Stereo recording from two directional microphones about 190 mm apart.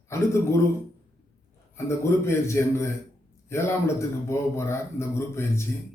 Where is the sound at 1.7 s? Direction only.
15° left (ahead or behind).